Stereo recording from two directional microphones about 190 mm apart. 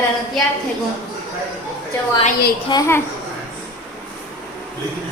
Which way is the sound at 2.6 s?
20° left (ahead or behind).